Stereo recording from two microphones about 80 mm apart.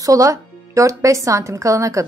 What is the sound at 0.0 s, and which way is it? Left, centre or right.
Speech, right.